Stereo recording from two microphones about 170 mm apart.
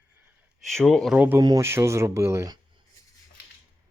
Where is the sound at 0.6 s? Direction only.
Centre (ahead or behind).